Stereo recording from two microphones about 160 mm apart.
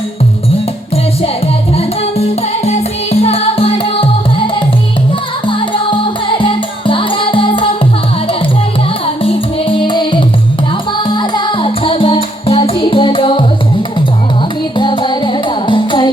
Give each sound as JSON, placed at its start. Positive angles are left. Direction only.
{"t": 1.7, "sound": "music", "side_deg": 40}
{"t": 5.5, "sound": "music", "side_deg": 30}
{"t": 9.2, "sound": "music", "side_deg": 35}
{"t": 14.8, "sound": "music", "side_deg": 30}